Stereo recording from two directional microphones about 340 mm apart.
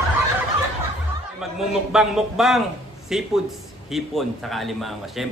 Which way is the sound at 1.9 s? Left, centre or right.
Centre.